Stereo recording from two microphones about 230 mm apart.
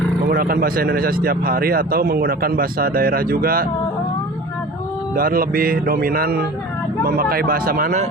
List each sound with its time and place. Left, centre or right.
0.3 s speech: right
5.1 s speech: right